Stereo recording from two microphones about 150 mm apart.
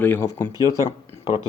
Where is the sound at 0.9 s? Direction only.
35° left (ahead or behind).